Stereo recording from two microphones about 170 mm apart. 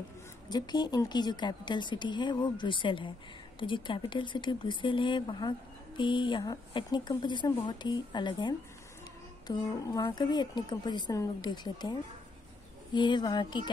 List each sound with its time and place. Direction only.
0.5 s speech: 25° left (ahead or behind)